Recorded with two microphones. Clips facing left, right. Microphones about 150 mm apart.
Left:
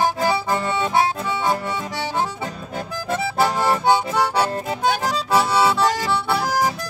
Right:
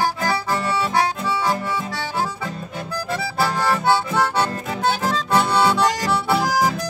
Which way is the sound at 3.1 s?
20° left (ahead or behind).